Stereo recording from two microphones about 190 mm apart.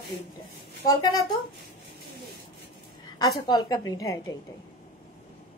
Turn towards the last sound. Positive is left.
turn(degrees=15)  # may be behind; listen again after turning